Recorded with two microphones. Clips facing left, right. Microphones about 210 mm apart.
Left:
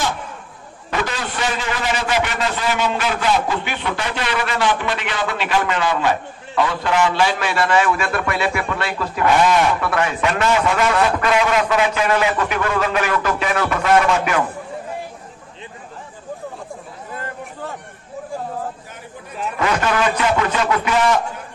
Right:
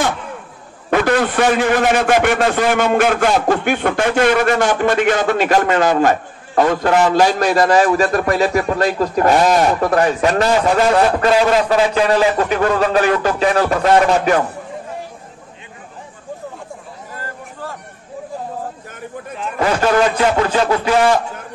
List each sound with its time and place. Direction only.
0.8 s a man's voice: 60° right (ahead or behind); by 14.4 s 35° right (ahead or behind)
19.6 s a man's voice: 35° right (ahead or behind)